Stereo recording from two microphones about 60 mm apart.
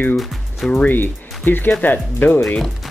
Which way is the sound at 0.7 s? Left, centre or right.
Left.